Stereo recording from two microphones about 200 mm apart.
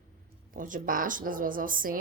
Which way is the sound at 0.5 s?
45° right (ahead or behind).